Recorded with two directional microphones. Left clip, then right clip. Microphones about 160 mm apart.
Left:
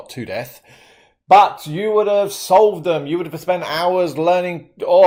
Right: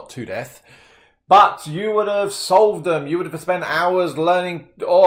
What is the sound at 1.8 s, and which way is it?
Speech, 40° left (ahead or behind).